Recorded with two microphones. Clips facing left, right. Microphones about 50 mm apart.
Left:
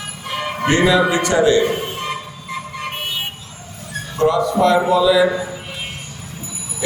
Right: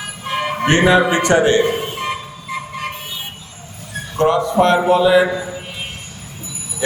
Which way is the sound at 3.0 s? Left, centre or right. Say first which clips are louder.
Left 5 dB; left.